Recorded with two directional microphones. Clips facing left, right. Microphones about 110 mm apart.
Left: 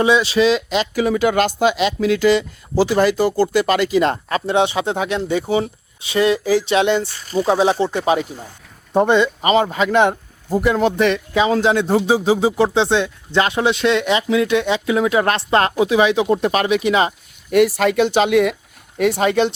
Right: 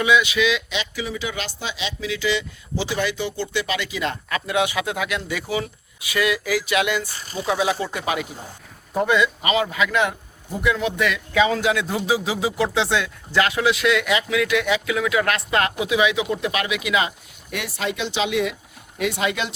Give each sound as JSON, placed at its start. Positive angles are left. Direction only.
{"t": 0.0, "sound": "speech", "side_deg": 35}
{"t": 18.9, "sound": "speech", "side_deg": 45}